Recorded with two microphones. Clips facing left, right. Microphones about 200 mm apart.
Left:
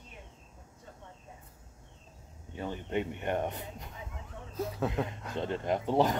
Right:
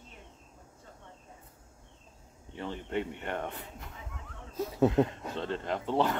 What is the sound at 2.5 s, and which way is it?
Speech, 20° left (ahead or behind).